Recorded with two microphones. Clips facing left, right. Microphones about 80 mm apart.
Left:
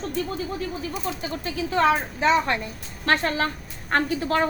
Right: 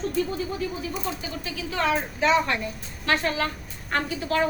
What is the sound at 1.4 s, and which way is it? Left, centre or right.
A woman's voice, left.